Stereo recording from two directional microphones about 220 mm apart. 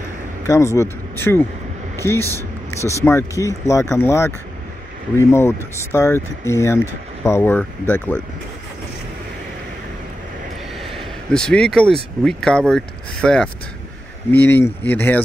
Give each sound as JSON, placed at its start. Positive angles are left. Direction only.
{"t": 0.5, "sound": "speech", "side_deg": 15}
{"t": 11.3, "sound": "speech", "side_deg": 5}